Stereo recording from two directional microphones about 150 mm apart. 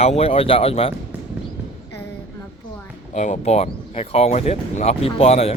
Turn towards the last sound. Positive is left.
turn(degrees=40)  # may be behind; listen again after turning